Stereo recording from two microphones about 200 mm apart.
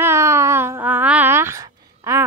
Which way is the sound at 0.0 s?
15° right (ahead or behind).